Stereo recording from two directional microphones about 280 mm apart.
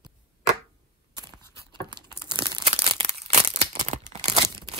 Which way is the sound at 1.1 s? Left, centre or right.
Centre.